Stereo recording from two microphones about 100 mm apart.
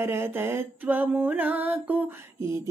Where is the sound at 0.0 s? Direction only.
25° right (ahead or behind).